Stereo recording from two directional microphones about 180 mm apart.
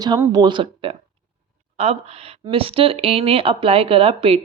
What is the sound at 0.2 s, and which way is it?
Speech, 25° right (ahead or behind).